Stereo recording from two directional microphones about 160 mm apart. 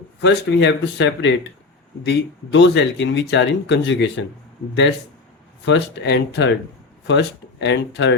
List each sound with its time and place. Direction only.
0.2 s speech: 90° left
2.6 s speech: 90° left